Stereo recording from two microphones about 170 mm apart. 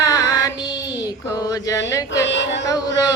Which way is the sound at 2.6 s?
20° left (ahead or behind).